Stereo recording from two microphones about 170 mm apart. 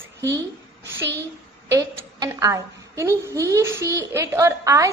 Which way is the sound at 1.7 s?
20° right (ahead or behind).